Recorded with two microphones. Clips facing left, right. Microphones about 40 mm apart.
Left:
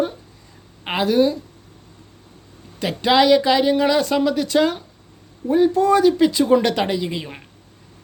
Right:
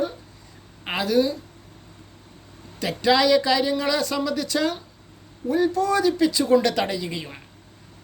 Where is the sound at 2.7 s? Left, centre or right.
Left.